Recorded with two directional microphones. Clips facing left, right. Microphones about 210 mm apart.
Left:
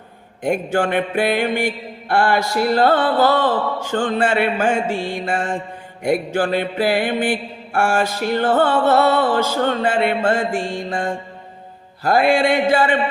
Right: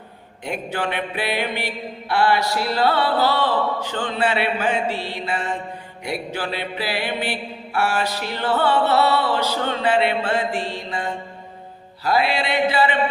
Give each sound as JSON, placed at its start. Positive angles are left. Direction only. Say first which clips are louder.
{"t": 0.4, "sound": "mantra", "louder": "left 7 dB", "side_deg": 50}